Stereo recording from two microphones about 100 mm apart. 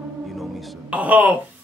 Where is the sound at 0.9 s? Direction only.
15° right (ahead or behind).